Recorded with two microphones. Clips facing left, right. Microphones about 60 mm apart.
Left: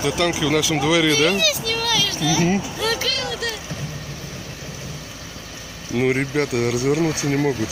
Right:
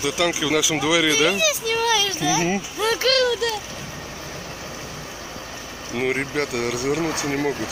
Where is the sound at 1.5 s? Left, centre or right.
Centre.